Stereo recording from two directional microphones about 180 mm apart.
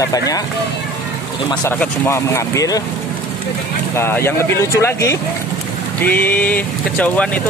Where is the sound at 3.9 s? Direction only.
15° left (ahead or behind).